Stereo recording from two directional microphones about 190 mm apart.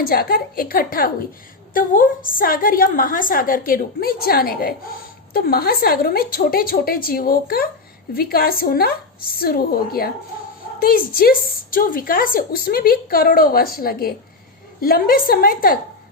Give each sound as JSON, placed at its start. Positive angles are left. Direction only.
{"t": 0.0, "sound": "a woman's voice", "side_deg": 50}